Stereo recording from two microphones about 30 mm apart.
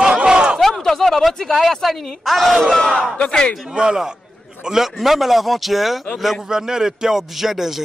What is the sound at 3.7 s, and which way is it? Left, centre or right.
Speech, right.